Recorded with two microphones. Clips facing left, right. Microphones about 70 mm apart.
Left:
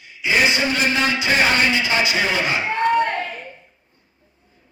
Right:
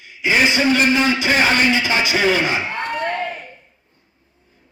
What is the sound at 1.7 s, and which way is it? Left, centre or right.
Speech, right.